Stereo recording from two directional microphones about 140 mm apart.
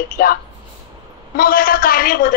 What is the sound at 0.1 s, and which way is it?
A woman's voice, 90° left.